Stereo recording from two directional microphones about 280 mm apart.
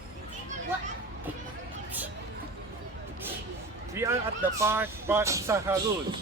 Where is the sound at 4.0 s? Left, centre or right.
Centre.